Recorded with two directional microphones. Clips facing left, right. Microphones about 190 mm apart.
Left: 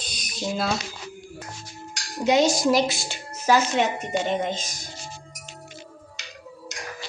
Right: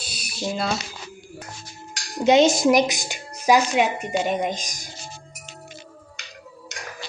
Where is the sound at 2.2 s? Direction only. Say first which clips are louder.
Right 4 dB; 25° right (ahead or behind).